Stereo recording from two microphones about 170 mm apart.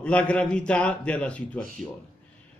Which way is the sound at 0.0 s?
5° left (ahead or behind).